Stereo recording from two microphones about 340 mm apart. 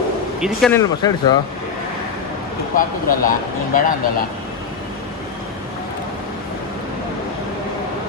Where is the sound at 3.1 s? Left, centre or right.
Left.